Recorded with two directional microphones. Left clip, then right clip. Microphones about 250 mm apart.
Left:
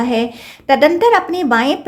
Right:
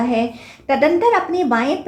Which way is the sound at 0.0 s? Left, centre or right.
Left.